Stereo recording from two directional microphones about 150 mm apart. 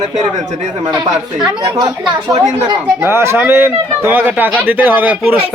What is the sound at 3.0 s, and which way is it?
A man's voice, 15° right (ahead or behind).